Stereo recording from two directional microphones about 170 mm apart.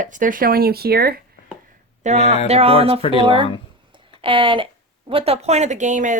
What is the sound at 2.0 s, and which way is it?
Speech, 45° right (ahead or behind).